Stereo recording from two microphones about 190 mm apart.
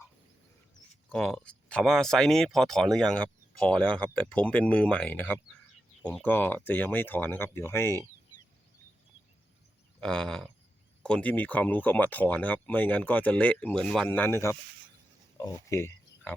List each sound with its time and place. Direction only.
1.1 s speech: 5° left (ahead or behind)
10.0 s speech: 5° left (ahead or behind)